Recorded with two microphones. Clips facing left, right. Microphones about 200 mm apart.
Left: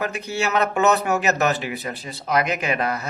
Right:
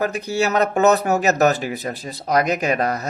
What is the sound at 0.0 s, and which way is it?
Speech, 40° right (ahead or behind).